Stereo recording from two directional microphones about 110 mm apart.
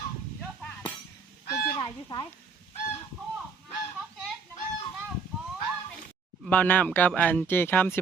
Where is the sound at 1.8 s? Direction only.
40° left (ahead or behind).